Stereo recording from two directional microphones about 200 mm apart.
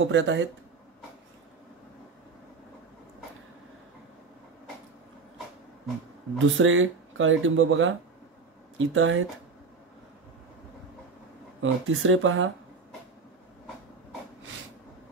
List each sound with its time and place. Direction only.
0.0 s speech: 70° right (ahead or behind)
6.3 s speech: 80° right
11.6 s speech: 80° right